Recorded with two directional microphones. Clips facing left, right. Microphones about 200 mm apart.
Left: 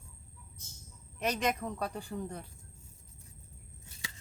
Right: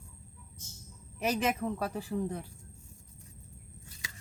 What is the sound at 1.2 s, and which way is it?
Speech, 5° right (ahead or behind).